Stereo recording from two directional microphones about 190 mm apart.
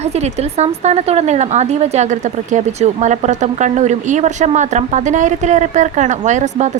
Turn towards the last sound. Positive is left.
turn(degrees=-40)  # may be behind; listen again after turning